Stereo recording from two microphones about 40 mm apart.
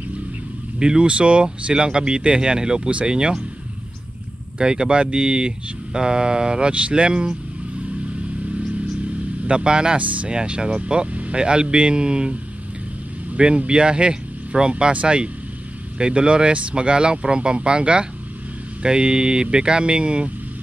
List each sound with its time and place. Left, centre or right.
0.7 s speech: right
4.6 s speech: right
9.5 s speech: right
9.9 s speech: right
10.3 s speech: right
13.7 s speech: right